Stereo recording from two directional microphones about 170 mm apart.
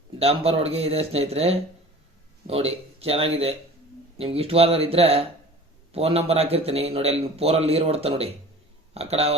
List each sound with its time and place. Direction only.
0.2 s a man's voice: 35° right (ahead or behind)